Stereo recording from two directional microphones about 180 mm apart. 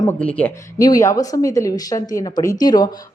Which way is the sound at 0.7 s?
20° left (ahead or behind).